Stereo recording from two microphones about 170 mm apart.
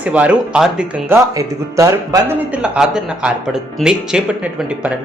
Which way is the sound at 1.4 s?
20° right (ahead or behind).